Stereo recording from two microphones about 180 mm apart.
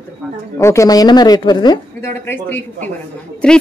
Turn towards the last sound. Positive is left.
turn(degrees=5)  # may be behind; listen again after turning